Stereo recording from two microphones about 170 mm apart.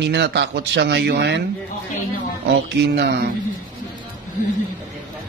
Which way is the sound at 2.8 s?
85° right.